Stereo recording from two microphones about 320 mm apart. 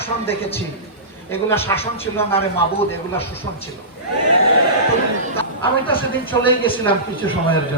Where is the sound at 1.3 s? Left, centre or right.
Centre.